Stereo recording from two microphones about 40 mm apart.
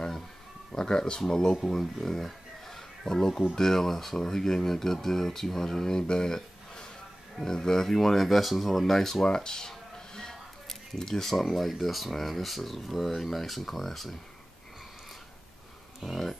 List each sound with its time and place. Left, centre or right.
0.7 s speech: left
1.6 s a sound: centre
3.1 s speech: centre
6.0 s a sound: centre
7.3 s speech: centre
16.0 s speech: centre